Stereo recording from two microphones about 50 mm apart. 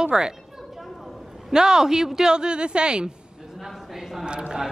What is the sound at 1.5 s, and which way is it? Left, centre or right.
Speech, centre.